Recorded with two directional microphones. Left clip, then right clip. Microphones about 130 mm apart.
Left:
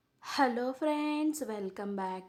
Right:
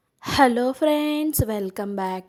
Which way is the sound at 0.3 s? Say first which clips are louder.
Right 12 dB; 55° right (ahead or behind).